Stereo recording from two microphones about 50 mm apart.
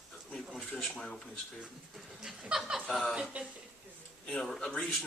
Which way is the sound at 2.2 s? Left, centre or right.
Centre.